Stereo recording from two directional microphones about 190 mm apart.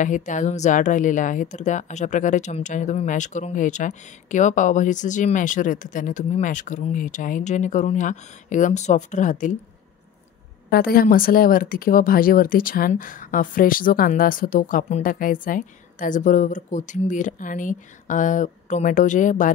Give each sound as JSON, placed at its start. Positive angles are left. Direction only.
{"t": 0.0, "sound": "speech", "side_deg": 40}
{"t": 10.7, "sound": "speech", "side_deg": 50}